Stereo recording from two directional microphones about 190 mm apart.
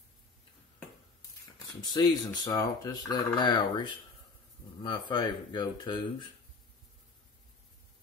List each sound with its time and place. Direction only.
1.8 s speech: 20° left (ahead or behind)